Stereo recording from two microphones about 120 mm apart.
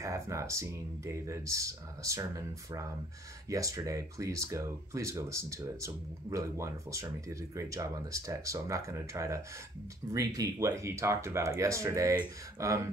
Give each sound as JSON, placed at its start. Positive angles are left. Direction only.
{"t": 0.0, "sound": "speech", "side_deg": -25}